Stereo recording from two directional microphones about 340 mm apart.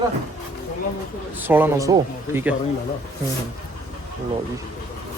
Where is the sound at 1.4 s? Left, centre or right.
Centre.